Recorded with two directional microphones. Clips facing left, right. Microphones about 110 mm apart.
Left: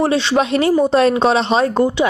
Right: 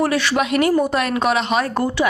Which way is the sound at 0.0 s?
25° left (ahead or behind).